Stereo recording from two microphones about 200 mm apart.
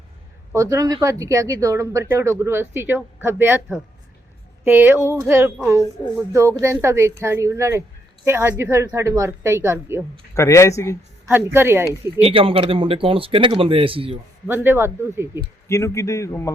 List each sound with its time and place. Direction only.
0.5 s speech: 15° right (ahead or behind)
4.6 s speech: 10° right (ahead or behind)
10.3 s a man's voice: 15° left (ahead or behind)
11.5 s speech: 10° right (ahead or behind)
12.2 s speech: 25° right (ahead or behind)
14.4 s speech: 10° right (ahead or behind)
15.6 s a man's voice: 15° left (ahead or behind)